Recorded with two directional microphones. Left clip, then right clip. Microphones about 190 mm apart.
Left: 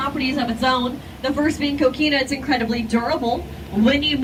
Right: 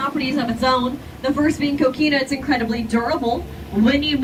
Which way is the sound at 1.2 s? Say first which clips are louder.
Right 1 dB; 20° right (ahead or behind).